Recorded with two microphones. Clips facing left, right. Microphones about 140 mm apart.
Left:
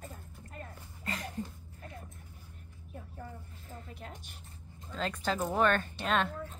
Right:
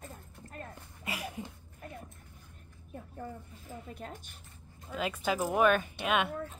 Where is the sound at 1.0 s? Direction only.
10° right (ahead or behind).